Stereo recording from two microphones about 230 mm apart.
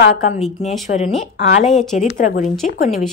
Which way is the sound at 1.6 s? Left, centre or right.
Centre.